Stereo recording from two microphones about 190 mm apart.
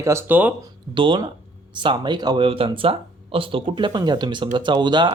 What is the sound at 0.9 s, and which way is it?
Speech, 25° right (ahead or behind).